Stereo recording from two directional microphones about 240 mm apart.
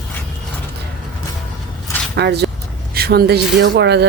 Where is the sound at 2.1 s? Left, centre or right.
Right.